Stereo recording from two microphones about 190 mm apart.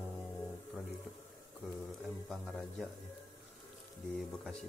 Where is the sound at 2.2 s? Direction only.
Centre (ahead or behind).